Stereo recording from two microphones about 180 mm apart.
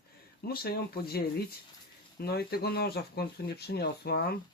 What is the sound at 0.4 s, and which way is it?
Speech, 60° left (ahead or behind).